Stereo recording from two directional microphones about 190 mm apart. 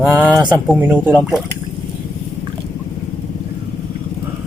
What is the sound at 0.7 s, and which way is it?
Speech, 10° right (ahead or behind).